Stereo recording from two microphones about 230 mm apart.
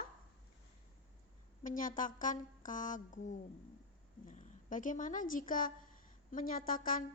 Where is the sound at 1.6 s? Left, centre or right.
Left.